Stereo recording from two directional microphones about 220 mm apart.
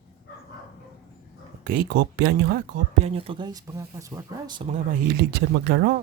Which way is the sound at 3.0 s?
25° right (ahead or behind).